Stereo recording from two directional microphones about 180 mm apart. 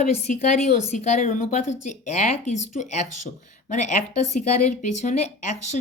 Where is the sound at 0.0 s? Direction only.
40° left (ahead or behind).